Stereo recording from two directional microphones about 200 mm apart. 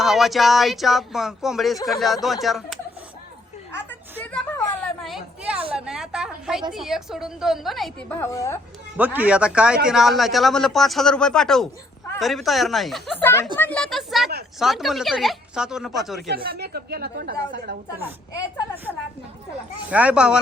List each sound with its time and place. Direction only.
0.0 s a man's voice: centre (ahead or behind)
4.2 s a sound: 10° left (ahead or behind)
5.0 s a sound: 5° right (ahead or behind)
5.7 s a woman's voice: 5° right (ahead or behind)
8.1 s a woman's voice: 15° left (ahead or behind)
9.0 s a man's voice: 10° right (ahead or behind)
13.2 s a woman's voice: 10° left (ahead or behind)
16.3 s a woman's voice: 50° right (ahead or behind)
19.9 s a man's voice: 5° right (ahead or behind)